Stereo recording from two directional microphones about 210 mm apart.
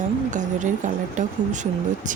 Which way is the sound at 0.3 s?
35° right (ahead or behind).